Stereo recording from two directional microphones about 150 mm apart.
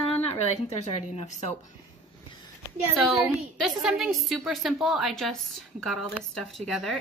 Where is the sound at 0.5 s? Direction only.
50° left (ahead or behind).